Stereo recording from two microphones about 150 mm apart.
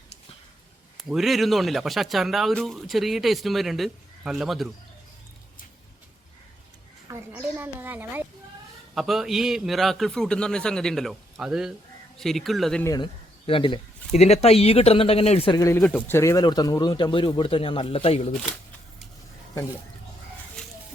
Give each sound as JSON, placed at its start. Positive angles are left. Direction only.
{"t": 0.9, "sound": "speech", "side_deg": 0}
{"t": 7.1, "sound": "a woman's voice", "side_deg": -15}
{"t": 9.0, "sound": "speech", "side_deg": 0}
{"t": 13.5, "sound": "speech", "side_deg": 35}
{"t": 14.1, "sound": "speech", "side_deg": 45}
{"t": 15.5, "sound": "speech", "side_deg": 20}